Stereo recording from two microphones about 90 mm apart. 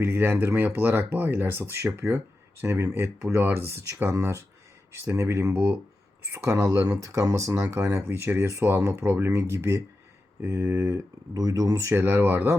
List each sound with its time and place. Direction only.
0.0 s speech: 25° right (ahead or behind)